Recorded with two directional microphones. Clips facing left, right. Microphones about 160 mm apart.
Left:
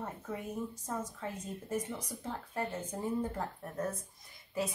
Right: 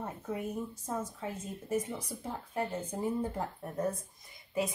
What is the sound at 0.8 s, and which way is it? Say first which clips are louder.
Speech: right 2 dB; 10° right (ahead or behind).